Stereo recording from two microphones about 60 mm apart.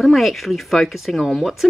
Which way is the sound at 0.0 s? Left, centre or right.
Centre.